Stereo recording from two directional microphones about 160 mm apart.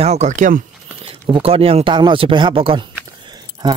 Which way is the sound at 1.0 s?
35° right (ahead or behind).